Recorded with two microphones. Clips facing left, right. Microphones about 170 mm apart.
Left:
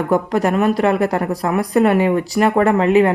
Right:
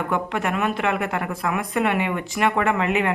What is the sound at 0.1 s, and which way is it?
Speech, 40° left (ahead or behind).